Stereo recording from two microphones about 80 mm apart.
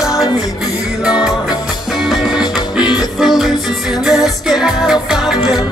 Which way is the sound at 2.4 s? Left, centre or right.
Left.